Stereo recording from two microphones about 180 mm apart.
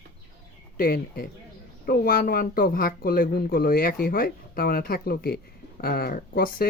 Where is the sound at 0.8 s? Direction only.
55° left (ahead or behind).